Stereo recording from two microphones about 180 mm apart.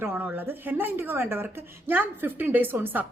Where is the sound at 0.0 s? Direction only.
10° right (ahead or behind).